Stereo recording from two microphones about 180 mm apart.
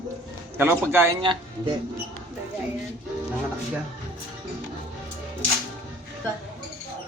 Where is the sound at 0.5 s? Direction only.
10° right (ahead or behind).